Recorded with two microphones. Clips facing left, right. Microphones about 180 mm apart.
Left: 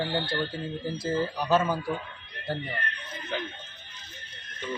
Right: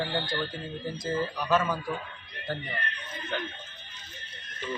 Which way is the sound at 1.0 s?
30° left (ahead or behind).